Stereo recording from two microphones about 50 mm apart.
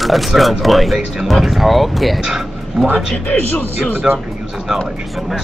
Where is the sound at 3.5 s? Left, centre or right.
Left.